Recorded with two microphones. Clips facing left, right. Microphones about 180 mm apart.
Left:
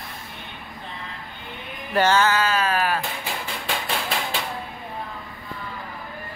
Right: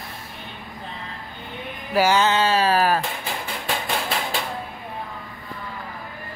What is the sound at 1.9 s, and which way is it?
Speech, 10° right (ahead or behind).